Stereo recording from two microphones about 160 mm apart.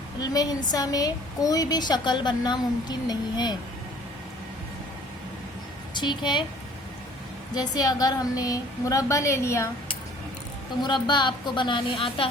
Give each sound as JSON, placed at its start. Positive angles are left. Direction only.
{"t": 0.2, "sound": "a woman's voice", "side_deg": 25}
{"t": 5.9, "sound": "speech", "side_deg": 30}
{"t": 7.5, "sound": "a woman's voice", "side_deg": 25}
{"t": 10.8, "sound": "a woman's voice", "side_deg": 30}